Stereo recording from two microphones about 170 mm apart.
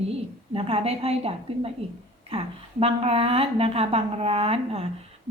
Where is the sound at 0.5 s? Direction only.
35° right (ahead or behind).